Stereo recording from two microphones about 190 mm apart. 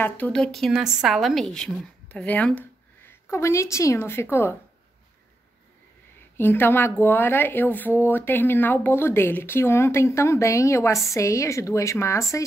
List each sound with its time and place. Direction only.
0.0 s speech: 5° left (ahead or behind)
6.3 s speech: 10° left (ahead or behind)